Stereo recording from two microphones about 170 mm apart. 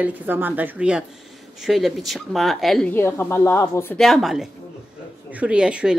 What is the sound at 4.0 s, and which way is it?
Speech, centre (ahead or behind).